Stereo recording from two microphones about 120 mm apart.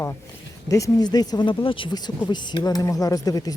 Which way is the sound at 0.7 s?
30° left (ahead or behind).